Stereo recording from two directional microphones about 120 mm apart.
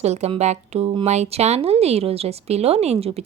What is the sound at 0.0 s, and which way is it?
Speech, 65° right (ahead or behind).